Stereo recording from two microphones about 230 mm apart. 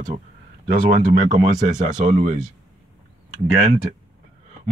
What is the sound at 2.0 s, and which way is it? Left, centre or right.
Speech, right.